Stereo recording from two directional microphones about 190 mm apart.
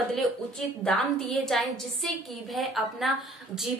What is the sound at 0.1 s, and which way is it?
A woman's voice, 5° left (ahead or behind).